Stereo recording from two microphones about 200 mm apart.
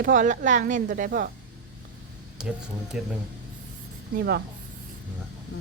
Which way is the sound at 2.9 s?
5° right (ahead or behind).